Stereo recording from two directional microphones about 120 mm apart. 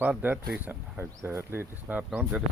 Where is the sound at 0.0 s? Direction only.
15° right (ahead or behind).